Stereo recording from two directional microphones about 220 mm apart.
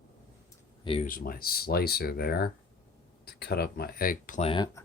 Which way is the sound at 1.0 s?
40° left (ahead or behind).